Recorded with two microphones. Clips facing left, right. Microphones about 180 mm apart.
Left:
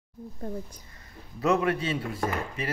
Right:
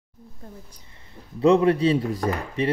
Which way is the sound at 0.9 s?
30° right (ahead or behind).